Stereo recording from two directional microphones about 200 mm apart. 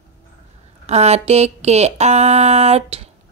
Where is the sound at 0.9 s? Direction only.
35° right (ahead or behind).